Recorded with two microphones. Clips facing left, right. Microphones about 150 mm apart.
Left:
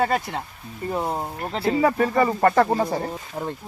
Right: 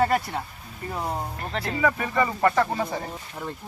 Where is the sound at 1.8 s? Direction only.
40° left (ahead or behind).